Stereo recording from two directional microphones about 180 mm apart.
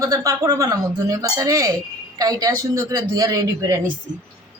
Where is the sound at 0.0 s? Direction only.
20° right (ahead or behind).